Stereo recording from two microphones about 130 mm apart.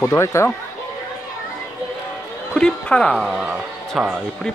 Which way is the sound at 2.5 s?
5° left (ahead or behind).